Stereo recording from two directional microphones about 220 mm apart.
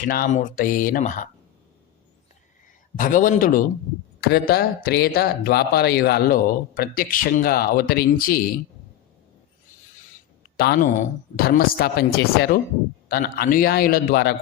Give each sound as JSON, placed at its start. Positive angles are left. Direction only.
{"t": 0.1, "sound": "speech", "side_deg": 40}
{"t": 3.0, "sound": "speech", "side_deg": 35}
{"t": 10.6, "sound": "speech", "side_deg": 45}